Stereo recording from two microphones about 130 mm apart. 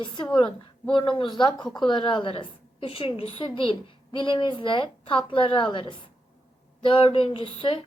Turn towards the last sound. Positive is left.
turn(degrees=45)  # may be behind; listen again after turning